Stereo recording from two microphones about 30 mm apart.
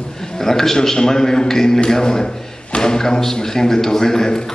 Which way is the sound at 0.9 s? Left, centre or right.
Centre.